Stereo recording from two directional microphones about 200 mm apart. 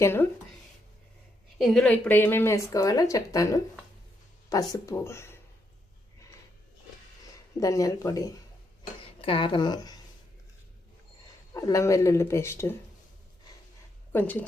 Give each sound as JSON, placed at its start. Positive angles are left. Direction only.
{"t": 0.0, "sound": "speech", "side_deg": 10}
{"t": 1.5, "sound": "speech", "side_deg": 0}
{"t": 4.7, "sound": "speech", "side_deg": 15}
{"t": 7.6, "sound": "a woman's voice", "side_deg": 15}
{"t": 11.5, "sound": "speech", "side_deg": 15}
{"t": 14.1, "sound": "speech", "side_deg": 10}